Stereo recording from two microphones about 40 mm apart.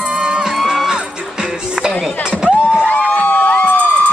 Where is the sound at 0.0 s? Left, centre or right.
Right.